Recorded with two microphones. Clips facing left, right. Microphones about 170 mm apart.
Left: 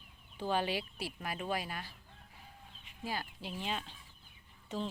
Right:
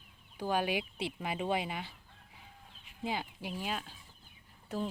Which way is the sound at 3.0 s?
20° right (ahead or behind).